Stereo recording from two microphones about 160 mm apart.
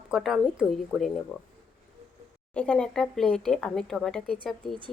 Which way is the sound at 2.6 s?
5° left (ahead or behind).